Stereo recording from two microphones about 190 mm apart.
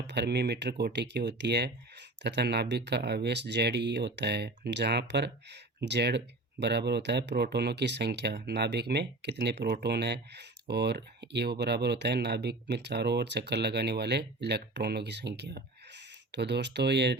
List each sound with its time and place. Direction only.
0.1 s speech: 60° right (ahead or behind)